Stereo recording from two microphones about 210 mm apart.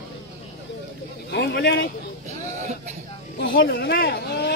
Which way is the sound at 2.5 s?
35° right (ahead or behind).